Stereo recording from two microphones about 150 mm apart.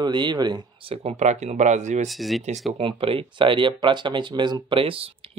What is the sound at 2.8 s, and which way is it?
Speech, 40° right (ahead or behind).